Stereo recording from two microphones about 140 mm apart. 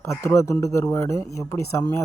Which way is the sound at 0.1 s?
20° left (ahead or behind).